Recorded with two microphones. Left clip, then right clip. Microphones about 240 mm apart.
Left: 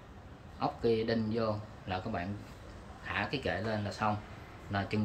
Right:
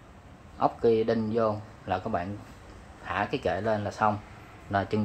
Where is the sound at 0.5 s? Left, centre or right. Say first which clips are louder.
Right 7 dB; centre.